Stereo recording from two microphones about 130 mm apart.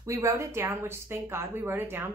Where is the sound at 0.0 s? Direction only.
25° right (ahead or behind).